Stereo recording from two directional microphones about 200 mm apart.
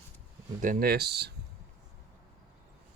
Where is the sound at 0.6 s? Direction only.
45° right (ahead or behind).